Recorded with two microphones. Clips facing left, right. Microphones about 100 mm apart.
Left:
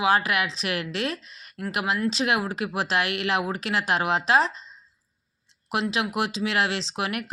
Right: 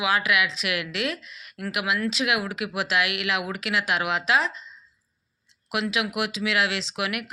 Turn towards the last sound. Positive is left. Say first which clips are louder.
# left 1 dB
turn(degrees=35)  # may be behind; listen again after turning